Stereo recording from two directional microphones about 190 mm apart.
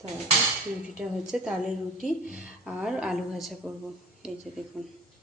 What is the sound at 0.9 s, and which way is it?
A woman's voice, 5° right (ahead or behind).